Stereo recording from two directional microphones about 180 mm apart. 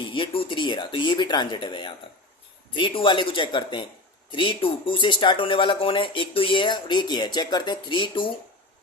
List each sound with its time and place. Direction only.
0.0 s speech: 30° left (ahead or behind)